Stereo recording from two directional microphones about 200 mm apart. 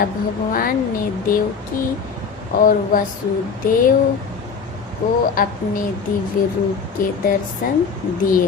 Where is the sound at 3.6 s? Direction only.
45° left (ahead or behind).